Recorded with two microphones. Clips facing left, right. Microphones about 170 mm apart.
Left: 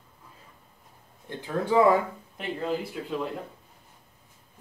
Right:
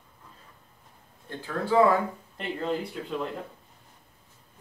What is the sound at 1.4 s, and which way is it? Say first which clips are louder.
Speech: left 1 dB; 15° left (ahead or behind).